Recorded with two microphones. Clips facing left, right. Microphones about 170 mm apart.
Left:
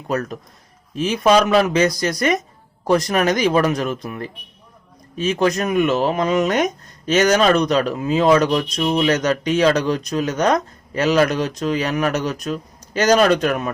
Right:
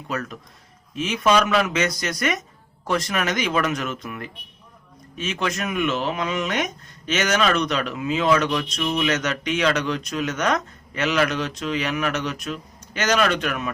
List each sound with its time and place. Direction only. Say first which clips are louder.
0.1 s speech: left 7 dB; 40° left (ahead or behind)